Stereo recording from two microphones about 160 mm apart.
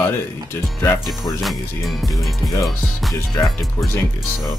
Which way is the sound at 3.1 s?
25° left (ahead or behind).